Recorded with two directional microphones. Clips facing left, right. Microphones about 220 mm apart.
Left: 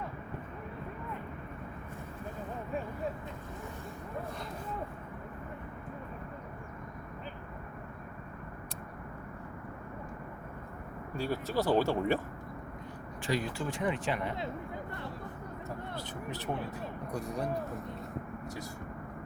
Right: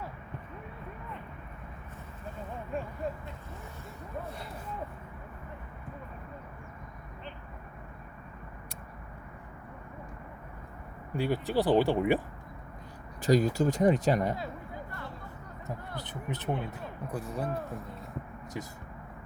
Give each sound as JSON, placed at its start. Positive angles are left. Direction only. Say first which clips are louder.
{"t": 11.2, "sound": "speech", "louder": "right 4 dB", "side_deg": -15}
{"t": 13.2, "sound": "speech", "louder": "right 9 dB", "side_deg": -40}
{"t": 16.0, "sound": "speech", "louder": "right 1 dB", "side_deg": -20}
{"t": 17.1, "sound": "speech", "louder": "right 1 dB", "side_deg": -5}